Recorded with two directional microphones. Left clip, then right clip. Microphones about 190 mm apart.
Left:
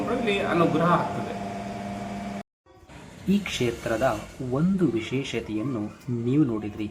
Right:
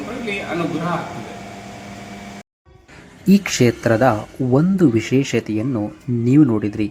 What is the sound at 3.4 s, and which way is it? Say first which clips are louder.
Speech: right 10 dB; 35° right (ahead or behind).